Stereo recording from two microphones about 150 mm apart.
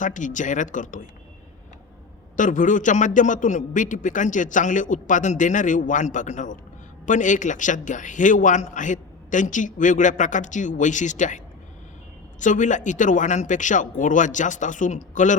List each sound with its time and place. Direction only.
0.0 s a man's voice: 60° left (ahead or behind)
2.3 s a man's voice: 60° left (ahead or behind)
12.4 s a man's voice: 55° left (ahead or behind)